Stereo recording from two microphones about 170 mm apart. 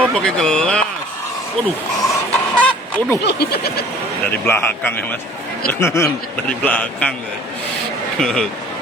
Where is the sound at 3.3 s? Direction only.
70° left (ahead or behind).